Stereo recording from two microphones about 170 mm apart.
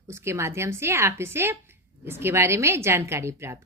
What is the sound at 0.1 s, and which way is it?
A woman's voice, 15° right (ahead or behind).